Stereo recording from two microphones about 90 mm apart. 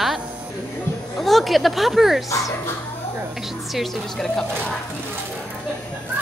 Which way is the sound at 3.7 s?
5° left (ahead or behind).